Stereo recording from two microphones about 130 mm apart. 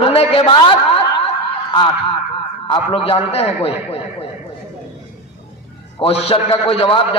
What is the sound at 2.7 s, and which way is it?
A man's voice, 45° left (ahead or behind).